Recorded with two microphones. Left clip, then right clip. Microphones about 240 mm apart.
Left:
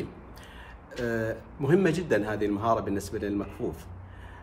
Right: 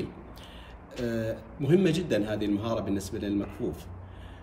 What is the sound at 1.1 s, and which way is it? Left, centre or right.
Speech, centre.